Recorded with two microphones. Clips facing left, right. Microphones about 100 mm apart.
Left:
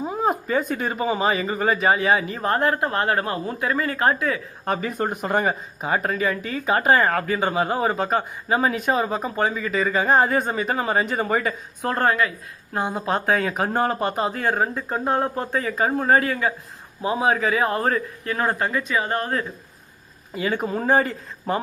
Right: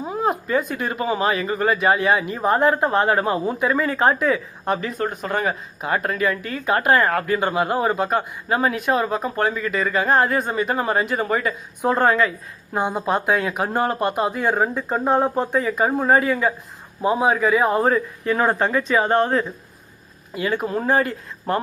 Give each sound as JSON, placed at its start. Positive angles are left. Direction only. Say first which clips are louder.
{"t": 0.0, "sound": "a sound", "louder": "even", "side_deg": 0}
{"t": 0.8, "sound": "speech", "louder": "right 1 dB", "side_deg": 0}
{"t": 2.5, "sound": "a man's voice", "louder": "right 4 dB", "side_deg": -20}
{"t": 4.6, "sound": "speech", "louder": "left 3 dB", "side_deg": 0}
{"t": 11.8, "sound": "a man's voice", "louder": "right 3 dB", "side_deg": -20}
{"t": 13.1, "sound": "speech", "louder": "left 1 dB", "side_deg": -5}
{"t": 14.4, "sound": "a man's voice", "louder": "right 2 dB", "side_deg": -15}
{"t": 20.3, "sound": "speech", "louder": "right 1 dB", "side_deg": 0}